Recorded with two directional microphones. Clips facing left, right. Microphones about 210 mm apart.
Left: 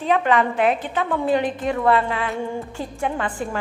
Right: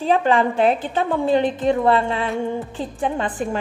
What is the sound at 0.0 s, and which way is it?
A woman's voice, 30° right (ahead or behind).